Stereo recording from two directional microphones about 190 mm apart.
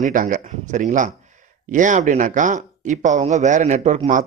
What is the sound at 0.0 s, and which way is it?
Speech, 45° right (ahead or behind).